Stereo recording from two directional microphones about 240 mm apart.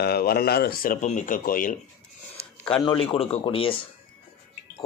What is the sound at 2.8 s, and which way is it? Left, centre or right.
Speech, left.